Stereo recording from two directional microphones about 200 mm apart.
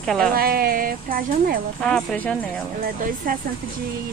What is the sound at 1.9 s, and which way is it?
Speech, 5° left (ahead or behind).